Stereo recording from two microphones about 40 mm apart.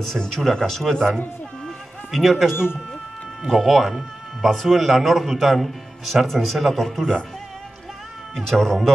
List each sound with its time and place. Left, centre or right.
0.2 s speech: centre
2.0 s speech: centre
2.5 s speech: left
3.4 s speech: centre
8.4 s speech: centre